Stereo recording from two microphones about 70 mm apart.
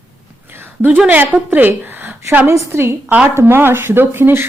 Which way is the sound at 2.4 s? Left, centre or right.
Right.